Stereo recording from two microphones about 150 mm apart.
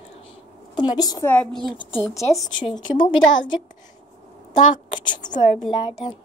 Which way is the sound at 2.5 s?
30° left (ahead or behind).